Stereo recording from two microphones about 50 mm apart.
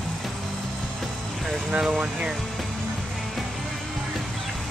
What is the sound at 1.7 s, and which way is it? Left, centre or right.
Speech, centre.